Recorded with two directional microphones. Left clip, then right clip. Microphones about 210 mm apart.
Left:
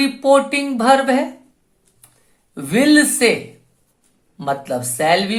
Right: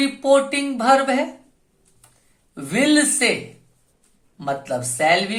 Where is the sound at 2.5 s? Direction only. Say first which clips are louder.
Left 4 dB; 30° left (ahead or behind).